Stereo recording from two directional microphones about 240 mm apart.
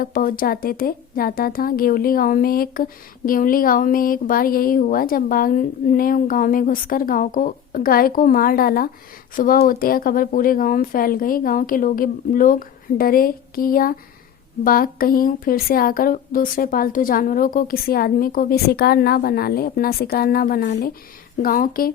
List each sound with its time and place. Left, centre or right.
0.0 s speech: left